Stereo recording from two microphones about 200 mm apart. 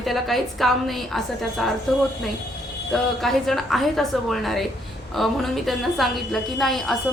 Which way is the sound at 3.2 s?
Centre (ahead or behind).